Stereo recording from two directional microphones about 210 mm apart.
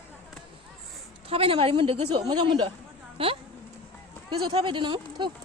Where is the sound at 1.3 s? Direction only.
25° right (ahead or behind).